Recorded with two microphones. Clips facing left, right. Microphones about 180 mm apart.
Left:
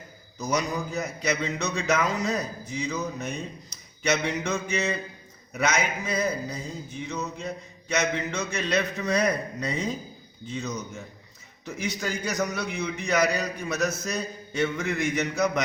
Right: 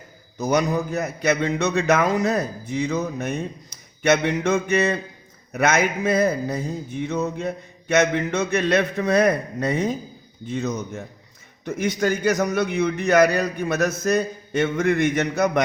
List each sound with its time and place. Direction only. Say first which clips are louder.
0.3 s speech: right 7 dB; 60° right (ahead or behind)